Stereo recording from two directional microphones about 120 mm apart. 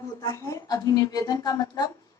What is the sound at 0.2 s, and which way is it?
A woman's voice, 25° left (ahead or behind).